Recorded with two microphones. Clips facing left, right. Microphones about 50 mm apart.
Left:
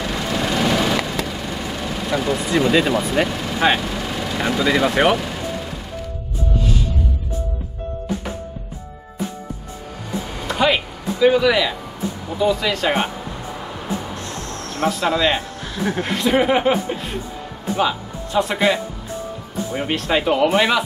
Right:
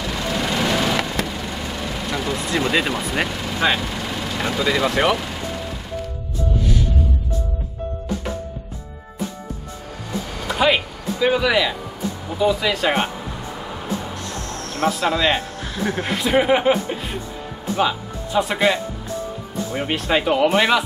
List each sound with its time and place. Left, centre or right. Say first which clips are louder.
0.0 s vehicle: left 1 dB; centre
0.5 s vehicle: left 2 dB; centre
1.0 s vehicle: even; centre
2.0 s speech: left 5 dB; centre
3.0 s speech: left 4 dB; centre
3.3 s speech: left 2 dB; centre
10.5 s speech: even; centre
14.1 s music: even; left
14.9 s speech: left 1 dB; centre
19.8 s speech: even; centre